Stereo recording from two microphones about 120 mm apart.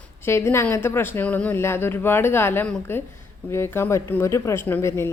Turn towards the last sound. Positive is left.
turn(degrees=25)  # may be behind; listen again after turning